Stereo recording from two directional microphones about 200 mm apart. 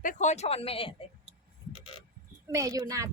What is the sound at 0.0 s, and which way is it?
Speech, 40° left (ahead or behind).